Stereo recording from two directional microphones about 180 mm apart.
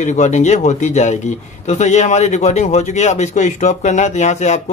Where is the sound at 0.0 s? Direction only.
40° left (ahead or behind).